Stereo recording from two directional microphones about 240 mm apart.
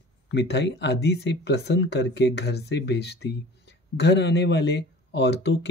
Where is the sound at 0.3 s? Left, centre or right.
Left.